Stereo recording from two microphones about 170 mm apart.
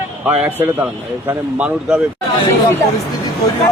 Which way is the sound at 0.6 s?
10° right (ahead or behind).